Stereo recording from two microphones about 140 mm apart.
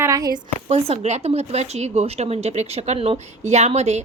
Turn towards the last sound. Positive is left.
turn(degrees=-50)  # may be behind; listen again after turning